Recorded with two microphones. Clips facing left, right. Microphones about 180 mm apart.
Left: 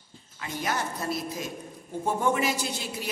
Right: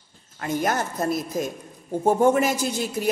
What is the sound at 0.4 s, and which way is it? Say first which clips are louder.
A woman's voice: right 7 dB; 50° right (ahead or behind).